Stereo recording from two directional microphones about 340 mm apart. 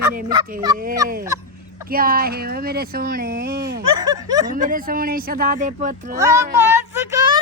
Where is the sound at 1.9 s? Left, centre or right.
Right.